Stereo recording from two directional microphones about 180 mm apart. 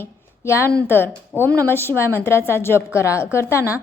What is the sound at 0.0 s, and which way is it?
A woman's voice, 15° left (ahead or behind).